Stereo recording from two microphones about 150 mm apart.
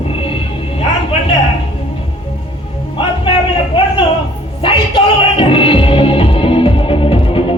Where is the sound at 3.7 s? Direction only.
35° left (ahead or behind).